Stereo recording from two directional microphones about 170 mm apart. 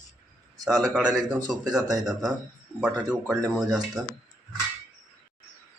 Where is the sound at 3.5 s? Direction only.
Centre (ahead or behind).